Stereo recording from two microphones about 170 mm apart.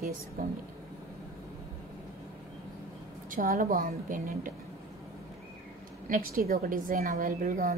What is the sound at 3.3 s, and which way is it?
A woman's voice, 55° right (ahead or behind).